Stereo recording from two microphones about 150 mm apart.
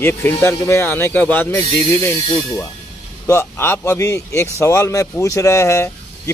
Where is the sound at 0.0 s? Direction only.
15° left (ahead or behind).